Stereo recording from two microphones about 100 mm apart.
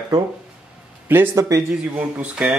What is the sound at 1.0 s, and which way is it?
Speech, 20° right (ahead or behind).